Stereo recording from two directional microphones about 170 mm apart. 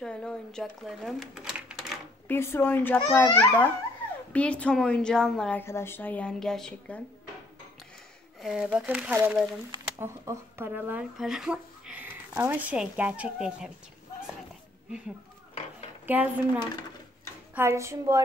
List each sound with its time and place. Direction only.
0.0 s speech: 5° left (ahead or behind)
2.2 s a woman's voice: 15° left (ahead or behind)
8.4 s speech: 5° right (ahead or behind)
16.1 s speech: 10° right (ahead or behind)
17.6 s speech: 15° right (ahead or behind)